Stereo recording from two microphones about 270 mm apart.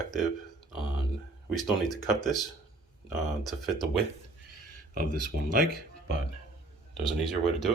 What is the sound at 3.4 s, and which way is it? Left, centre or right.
Speech, centre.